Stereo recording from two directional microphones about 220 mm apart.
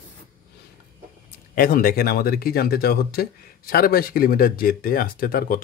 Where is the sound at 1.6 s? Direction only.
40° left (ahead or behind).